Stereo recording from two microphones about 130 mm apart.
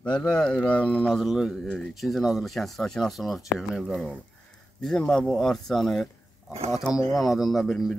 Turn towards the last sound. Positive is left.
turn(degrees=0)  # may be behind; listen again after turning